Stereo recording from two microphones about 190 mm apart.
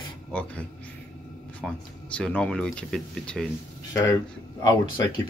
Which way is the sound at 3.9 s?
15° left (ahead or behind).